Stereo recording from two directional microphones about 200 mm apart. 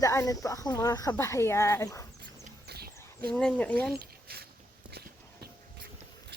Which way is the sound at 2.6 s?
50° right (ahead or behind).